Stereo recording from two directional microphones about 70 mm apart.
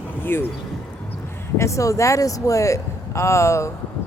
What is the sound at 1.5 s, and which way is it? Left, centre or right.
Speech, left.